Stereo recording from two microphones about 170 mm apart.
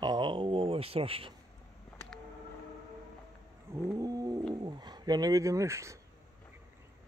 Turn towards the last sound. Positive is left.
turn(degrees=-15)  # may be behind; listen again after turning